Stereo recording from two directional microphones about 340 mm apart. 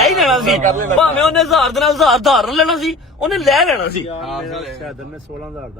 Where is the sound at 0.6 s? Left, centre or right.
Right.